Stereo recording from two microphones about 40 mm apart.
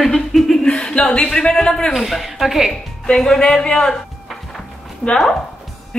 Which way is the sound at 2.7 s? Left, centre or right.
Centre.